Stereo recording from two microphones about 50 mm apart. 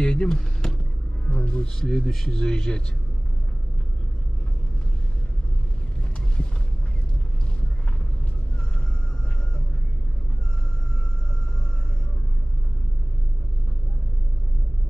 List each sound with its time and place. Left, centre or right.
0.0 s speech: centre
1.8 s speech: centre